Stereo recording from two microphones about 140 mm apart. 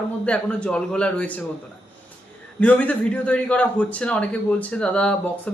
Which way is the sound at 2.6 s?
10° left (ahead or behind).